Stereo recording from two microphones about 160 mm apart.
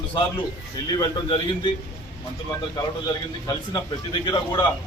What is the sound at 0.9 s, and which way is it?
Speech, 30° left (ahead or behind).